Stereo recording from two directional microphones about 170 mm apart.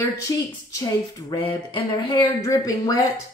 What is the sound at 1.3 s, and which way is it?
A woman's voice, 30° left (ahead or behind).